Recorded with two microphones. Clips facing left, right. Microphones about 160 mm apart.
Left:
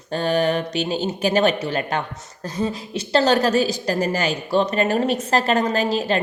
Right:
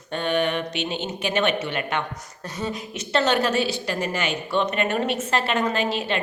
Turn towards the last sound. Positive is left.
turn(degrees=40)  # may be behind; listen again after turning